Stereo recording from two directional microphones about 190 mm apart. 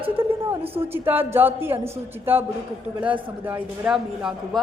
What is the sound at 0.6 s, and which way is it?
Speech, 30° right (ahead or behind).